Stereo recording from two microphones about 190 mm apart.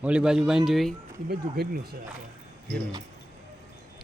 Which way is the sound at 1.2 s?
55° right (ahead or behind).